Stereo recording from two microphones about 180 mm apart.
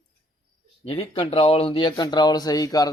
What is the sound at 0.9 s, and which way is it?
Speech, 30° left (ahead or behind).